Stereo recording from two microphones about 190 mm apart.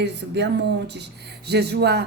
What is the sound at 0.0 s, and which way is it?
A woman's voice, 65° right (ahead or behind).